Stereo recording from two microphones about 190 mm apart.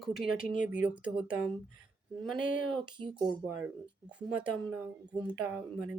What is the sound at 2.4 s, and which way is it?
Speech, 45° left (ahead or behind).